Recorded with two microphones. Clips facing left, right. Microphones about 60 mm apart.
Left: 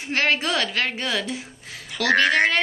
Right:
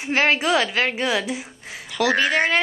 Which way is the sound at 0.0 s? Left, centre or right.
Centre.